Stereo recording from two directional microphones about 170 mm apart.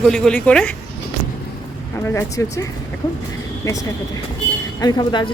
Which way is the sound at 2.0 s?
15° left (ahead or behind).